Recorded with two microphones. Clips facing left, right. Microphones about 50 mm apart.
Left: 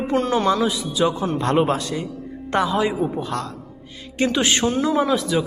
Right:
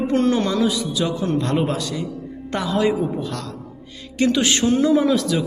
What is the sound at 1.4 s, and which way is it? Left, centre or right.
Speech, left.